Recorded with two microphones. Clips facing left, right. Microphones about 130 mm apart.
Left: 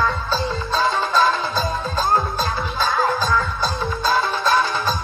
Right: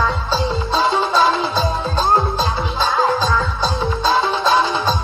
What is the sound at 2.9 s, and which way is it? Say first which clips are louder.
Music: right 3 dB; 20° right (ahead or behind).